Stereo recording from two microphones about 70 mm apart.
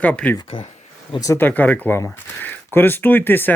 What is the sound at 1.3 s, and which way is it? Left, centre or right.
Speech, left.